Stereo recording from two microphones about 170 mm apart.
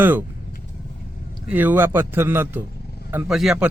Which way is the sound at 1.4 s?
10° right (ahead or behind).